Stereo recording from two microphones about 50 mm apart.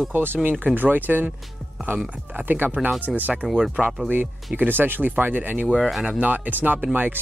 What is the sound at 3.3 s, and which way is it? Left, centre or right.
Speech, centre.